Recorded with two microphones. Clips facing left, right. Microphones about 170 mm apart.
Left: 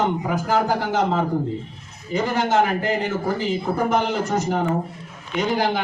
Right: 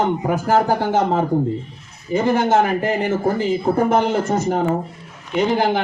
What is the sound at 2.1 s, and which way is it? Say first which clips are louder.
A man's voice: right 4 dB; 50° right (ahead or behind).